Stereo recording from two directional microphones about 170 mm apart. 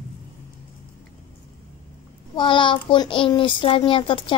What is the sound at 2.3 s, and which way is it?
A child's voice, 30° left (ahead or behind).